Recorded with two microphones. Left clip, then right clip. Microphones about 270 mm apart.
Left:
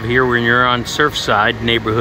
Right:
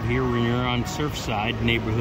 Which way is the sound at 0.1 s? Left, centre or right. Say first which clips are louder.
Left 12 dB; left.